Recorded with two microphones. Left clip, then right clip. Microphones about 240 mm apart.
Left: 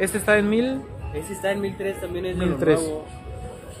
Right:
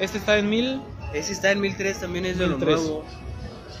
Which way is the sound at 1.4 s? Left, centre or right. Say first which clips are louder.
Right 3 dB; right.